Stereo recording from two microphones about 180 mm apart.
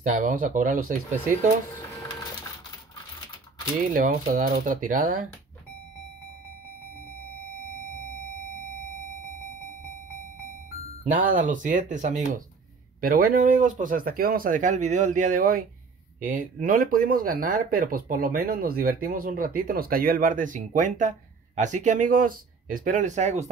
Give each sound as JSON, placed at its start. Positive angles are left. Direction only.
{"t": 0.0, "sound": "speech", "side_deg": -45}
{"t": 3.9, "sound": "speech", "side_deg": -50}
{"t": 11.1, "sound": "speech", "side_deg": -50}